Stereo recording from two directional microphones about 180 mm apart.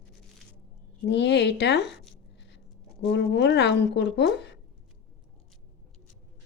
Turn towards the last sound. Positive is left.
turn(degrees=70)  # may be behind; listen again after turning